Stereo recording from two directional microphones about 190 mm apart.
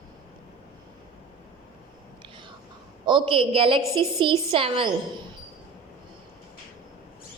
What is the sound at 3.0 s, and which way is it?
A woman's voice, 25° right (ahead or behind).